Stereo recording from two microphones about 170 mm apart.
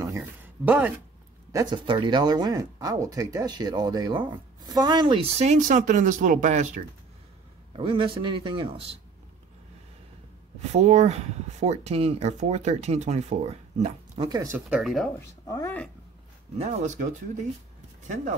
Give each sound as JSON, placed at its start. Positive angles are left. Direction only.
{"t": 0.0, "sound": "a sound", "side_deg": -15}
{"t": 1.5, "sound": "speech", "side_deg": -20}
{"t": 7.7, "sound": "speech", "side_deg": -30}
{"t": 10.7, "sound": "speech", "side_deg": -40}
{"t": 14.7, "sound": "speech", "side_deg": 0}
{"t": 15.1, "sound": "speech", "side_deg": 20}
{"t": 16.5, "sound": "speech", "side_deg": -45}